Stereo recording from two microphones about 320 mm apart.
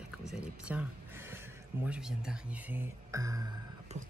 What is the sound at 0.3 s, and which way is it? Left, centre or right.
Speech, centre.